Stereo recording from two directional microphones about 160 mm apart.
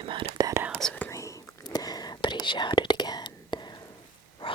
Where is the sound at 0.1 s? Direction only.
30° right (ahead or behind).